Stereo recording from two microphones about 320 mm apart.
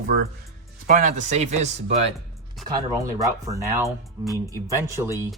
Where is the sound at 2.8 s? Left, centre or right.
Centre.